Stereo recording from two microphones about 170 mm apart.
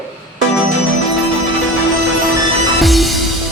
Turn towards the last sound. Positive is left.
turn(degrees=0)  # may be behind; listen again after turning